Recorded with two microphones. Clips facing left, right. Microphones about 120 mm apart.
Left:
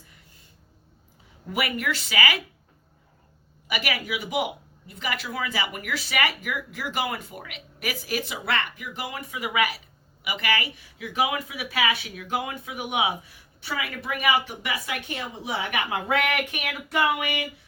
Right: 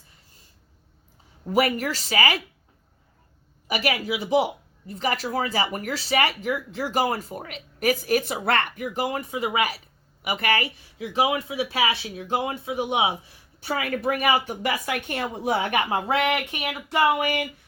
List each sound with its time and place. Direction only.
1.5 s speech: 35° right (ahead or behind)
3.7 s speech: 30° right (ahead or behind)
10.2 s a woman's voice: 50° right (ahead or behind)
10.9 s speech: 30° right (ahead or behind)
13.6 s a woman's voice: 45° right (ahead or behind)
15.7 s speech: 30° right (ahead or behind)